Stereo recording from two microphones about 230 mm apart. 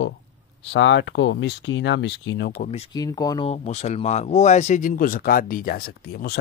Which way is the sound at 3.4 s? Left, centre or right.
Left.